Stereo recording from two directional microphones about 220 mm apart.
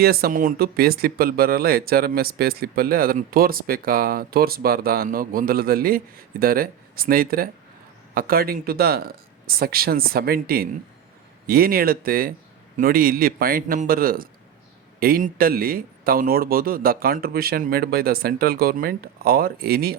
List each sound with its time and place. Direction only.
0.0 s speech: 45° right (ahead or behind)